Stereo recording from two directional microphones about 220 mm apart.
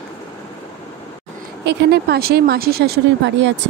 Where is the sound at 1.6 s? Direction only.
50° right (ahead or behind).